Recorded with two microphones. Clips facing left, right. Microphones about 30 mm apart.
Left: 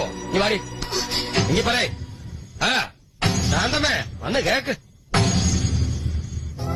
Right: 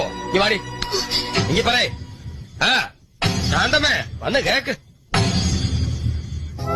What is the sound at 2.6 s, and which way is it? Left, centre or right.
Music, right.